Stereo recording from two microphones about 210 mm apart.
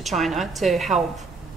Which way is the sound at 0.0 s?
Centre (ahead or behind).